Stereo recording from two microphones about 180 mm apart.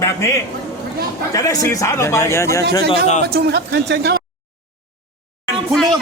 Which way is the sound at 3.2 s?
60° right (ahead or behind).